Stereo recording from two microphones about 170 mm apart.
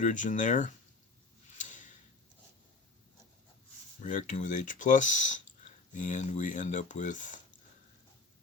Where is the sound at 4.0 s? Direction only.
50° left (ahead or behind).